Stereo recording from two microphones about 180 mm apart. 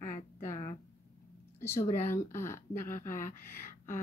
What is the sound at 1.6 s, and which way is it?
Speech, 15° left (ahead or behind).